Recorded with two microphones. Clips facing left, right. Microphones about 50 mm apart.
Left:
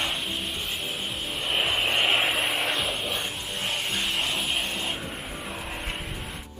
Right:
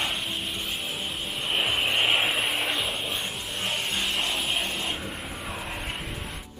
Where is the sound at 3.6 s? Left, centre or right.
Centre.